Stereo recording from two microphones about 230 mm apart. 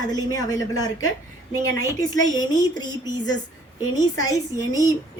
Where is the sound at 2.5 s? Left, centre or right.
Centre.